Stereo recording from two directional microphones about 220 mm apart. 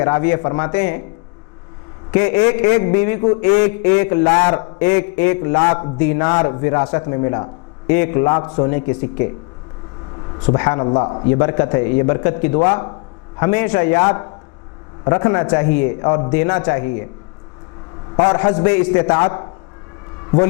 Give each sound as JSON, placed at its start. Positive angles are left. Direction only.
{"t": 0.0, "sound": "a man's voice", "side_deg": 15}
{"t": 2.1, "sound": "a man's voice", "side_deg": 15}
{"t": 6.2, "sound": "a man's voice", "side_deg": 25}
{"t": 10.4, "sound": "a man's voice", "side_deg": 15}
{"t": 15.0, "sound": "a man's voice", "side_deg": 20}
{"t": 18.4, "sound": "a man's voice", "side_deg": 20}